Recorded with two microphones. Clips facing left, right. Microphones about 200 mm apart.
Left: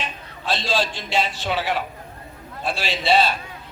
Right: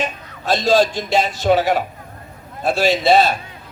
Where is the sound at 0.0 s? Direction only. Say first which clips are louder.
Right 7 dB; 45° right (ahead or behind).